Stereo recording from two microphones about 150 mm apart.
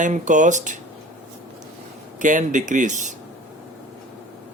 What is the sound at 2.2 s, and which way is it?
Speech, 55° right (ahead or behind).